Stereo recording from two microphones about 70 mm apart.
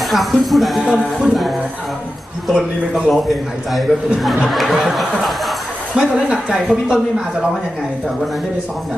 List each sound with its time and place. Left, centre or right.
0.1 s speech: centre
2.4 s speech: centre
4.5 s a woman's voice: centre